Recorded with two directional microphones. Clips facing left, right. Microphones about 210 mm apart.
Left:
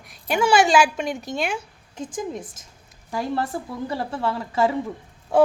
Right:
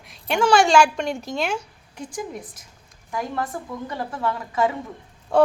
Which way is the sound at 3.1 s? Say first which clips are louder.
Left 2 dB; 30° left (ahead or behind).